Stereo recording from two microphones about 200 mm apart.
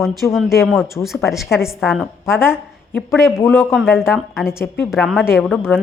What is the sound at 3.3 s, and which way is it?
Speech, 10° left (ahead or behind).